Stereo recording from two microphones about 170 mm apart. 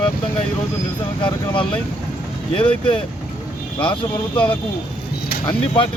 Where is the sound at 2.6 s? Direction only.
5° left (ahead or behind).